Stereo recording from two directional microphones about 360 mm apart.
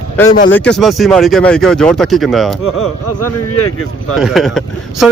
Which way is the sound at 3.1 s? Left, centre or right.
Left.